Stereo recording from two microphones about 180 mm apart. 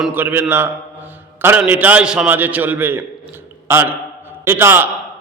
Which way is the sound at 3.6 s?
15° right (ahead or behind).